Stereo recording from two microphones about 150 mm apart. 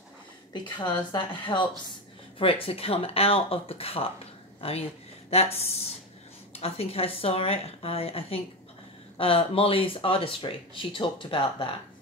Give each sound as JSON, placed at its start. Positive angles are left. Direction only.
{"t": 0.5, "sound": "speech", "side_deg": 30}